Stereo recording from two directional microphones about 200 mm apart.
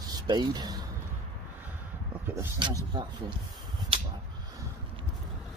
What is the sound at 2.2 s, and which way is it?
Speech, 10° right (ahead or behind).